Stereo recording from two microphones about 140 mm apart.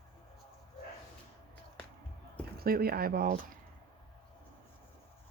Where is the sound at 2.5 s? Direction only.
90° right.